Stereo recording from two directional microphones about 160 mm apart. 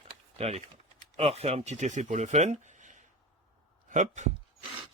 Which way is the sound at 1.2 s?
40° right (ahead or behind).